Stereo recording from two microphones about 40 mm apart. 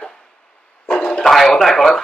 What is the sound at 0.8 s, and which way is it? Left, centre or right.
Speech, left.